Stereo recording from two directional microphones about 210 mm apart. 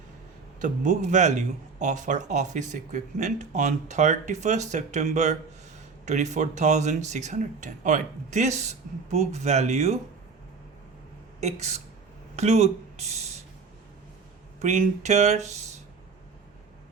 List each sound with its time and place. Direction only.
0.6 s speech: 35° right (ahead or behind)
11.3 s speech: 30° right (ahead or behind)
14.6 s speech: 35° right (ahead or behind)